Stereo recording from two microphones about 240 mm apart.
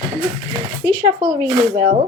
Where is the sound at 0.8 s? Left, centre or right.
Centre.